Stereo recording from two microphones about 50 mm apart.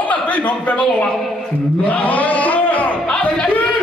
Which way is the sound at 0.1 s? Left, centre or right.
Left.